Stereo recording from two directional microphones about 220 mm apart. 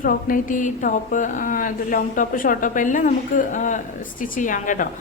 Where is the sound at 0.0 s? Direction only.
40° left (ahead or behind).